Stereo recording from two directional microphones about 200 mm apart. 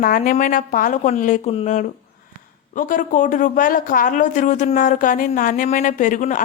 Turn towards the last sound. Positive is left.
turn(degrees=40)  # may be behind; listen again after turning